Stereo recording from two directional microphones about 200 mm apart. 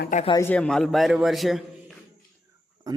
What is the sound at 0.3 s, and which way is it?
Speech, 15° left (ahead or behind).